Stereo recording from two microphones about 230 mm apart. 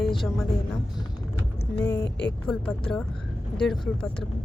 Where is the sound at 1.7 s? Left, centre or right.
Centre.